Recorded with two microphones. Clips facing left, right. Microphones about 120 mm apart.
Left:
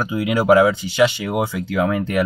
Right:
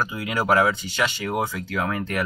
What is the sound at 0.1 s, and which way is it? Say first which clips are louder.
Speech: left 11 dB; 15° left (ahead or behind).